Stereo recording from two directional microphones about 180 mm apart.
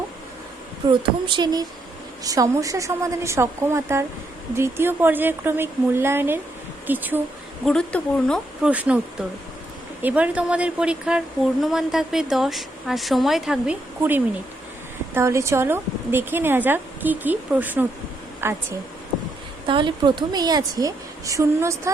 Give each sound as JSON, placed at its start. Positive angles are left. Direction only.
{"t": 0.9, "sound": "a woman's voice", "side_deg": -25}
{"t": 7.6, "sound": "speech", "side_deg": 5}
{"t": 8.7, "sound": "a woman's voice", "side_deg": -10}
{"t": 10.0, "sound": "a woman's voice", "side_deg": -10}
{"t": 19.6, "sound": "a woman's voice", "side_deg": -25}